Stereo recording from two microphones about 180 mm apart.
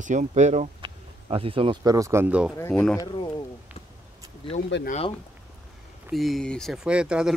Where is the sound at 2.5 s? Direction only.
15° left (ahead or behind).